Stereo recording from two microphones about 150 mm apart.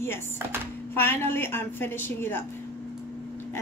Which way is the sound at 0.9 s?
15° left (ahead or behind).